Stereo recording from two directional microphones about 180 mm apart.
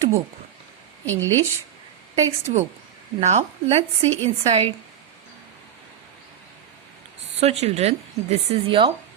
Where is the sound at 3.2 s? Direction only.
40° right (ahead or behind).